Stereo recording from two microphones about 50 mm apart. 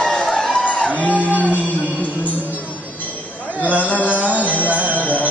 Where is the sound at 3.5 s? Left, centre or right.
Right.